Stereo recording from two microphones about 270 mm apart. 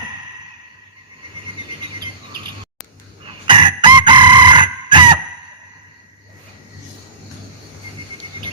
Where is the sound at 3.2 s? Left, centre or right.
Centre.